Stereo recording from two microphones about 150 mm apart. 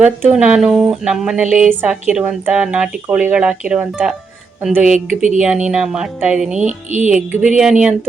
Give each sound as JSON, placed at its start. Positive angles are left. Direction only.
{"t": 0.0, "sound": "speech", "side_deg": -10}
{"t": 4.9, "sound": "speech", "side_deg": -55}
{"t": 5.6, "sound": "speech", "side_deg": -5}
{"t": 6.6, "sound": "speech", "side_deg": -55}
{"t": 7.1, "sound": "speech", "side_deg": -10}